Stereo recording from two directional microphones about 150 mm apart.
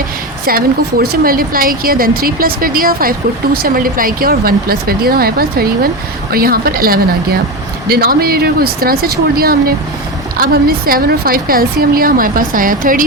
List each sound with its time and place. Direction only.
0.4 s a woman's voice: 85° right; by 13.1 s 65° right (ahead or behind)